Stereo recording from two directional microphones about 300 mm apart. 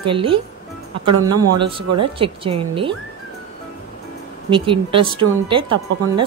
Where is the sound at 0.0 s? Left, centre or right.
Centre.